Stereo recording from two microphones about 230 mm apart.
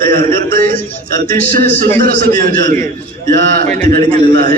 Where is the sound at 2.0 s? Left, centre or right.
Right.